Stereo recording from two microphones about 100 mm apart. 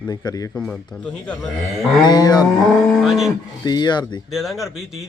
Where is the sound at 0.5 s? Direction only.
10° left (ahead or behind).